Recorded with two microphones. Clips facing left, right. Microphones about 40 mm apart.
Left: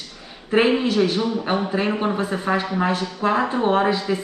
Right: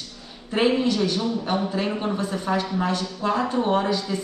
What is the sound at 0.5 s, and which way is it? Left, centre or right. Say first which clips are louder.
A woman's voice: left 3 dB; left.